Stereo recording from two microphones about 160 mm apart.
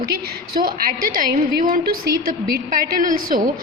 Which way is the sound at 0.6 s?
65° right (ahead or behind).